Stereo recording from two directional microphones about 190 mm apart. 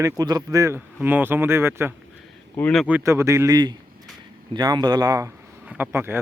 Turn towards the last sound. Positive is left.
turn(degrees=-10)  # may be behind; listen again after turning